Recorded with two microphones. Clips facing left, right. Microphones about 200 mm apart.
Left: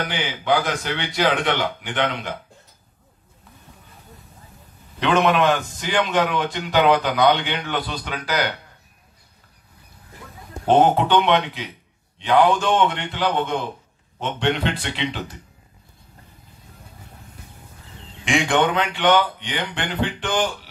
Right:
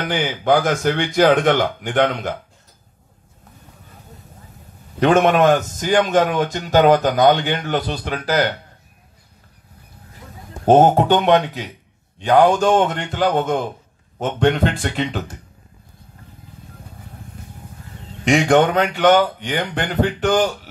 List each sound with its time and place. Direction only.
0.1 s a man's voice: 45° right (ahead or behind)
5.0 s a man's voice: 45° right (ahead or behind)
10.6 s a man's voice: 45° right (ahead or behind)
18.1 s a man's voice: 40° right (ahead or behind)